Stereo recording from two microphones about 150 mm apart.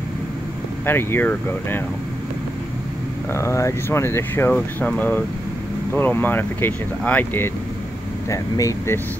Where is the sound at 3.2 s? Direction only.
20° left (ahead or behind).